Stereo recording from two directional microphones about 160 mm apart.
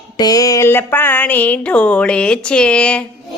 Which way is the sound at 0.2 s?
25° left (ahead or behind).